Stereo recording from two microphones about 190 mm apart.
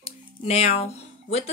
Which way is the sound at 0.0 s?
35° left (ahead or behind).